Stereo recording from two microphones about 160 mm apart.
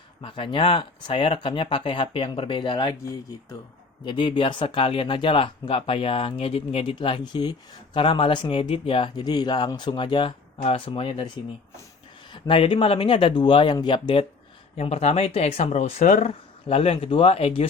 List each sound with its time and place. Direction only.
0.2 s speech: 30° left (ahead or behind)
12.3 s speech: 35° left (ahead or behind)
14.8 s speech: 40° left (ahead or behind)
16.6 s speech: 35° left (ahead or behind)